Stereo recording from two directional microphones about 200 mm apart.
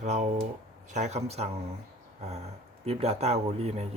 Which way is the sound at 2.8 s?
30° right (ahead or behind).